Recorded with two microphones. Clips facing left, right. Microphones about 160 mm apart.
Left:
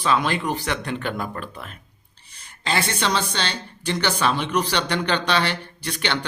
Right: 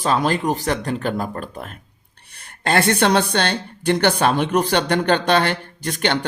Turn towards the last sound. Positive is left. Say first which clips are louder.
# right 5 dB
turn(degrees=-45)  # may be behind; listen again after turning